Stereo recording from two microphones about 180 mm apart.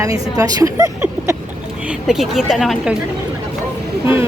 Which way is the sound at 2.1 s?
Centre (ahead or behind).